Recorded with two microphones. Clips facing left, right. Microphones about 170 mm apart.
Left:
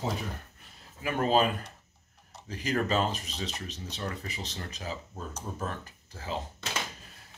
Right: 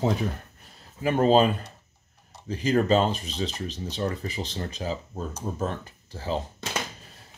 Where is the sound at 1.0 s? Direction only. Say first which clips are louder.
Right 6 dB; 30° right (ahead or behind).